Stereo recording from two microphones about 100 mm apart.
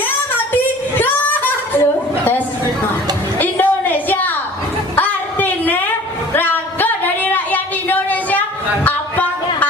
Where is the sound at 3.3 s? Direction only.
20° left (ahead or behind).